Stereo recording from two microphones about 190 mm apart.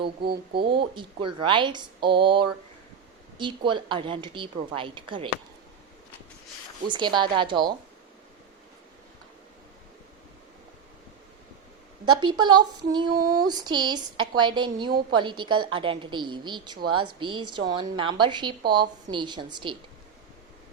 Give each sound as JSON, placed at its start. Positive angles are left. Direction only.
{"t": 0.5, "sound": "speech", "side_deg": -25}
{"t": 6.8, "sound": "speech", "side_deg": -25}
{"t": 12.0, "sound": "speech", "side_deg": -25}
{"t": 13.1, "sound": "a sound", "side_deg": -50}
{"t": 13.5, "sound": "speech", "side_deg": -20}